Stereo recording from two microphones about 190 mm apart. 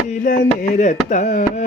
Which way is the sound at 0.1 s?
45° left (ahead or behind).